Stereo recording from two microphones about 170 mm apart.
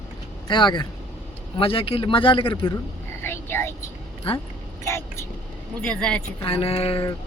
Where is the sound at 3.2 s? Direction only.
15° left (ahead or behind).